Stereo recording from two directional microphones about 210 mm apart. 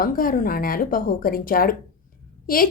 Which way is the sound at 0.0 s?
40° left (ahead or behind).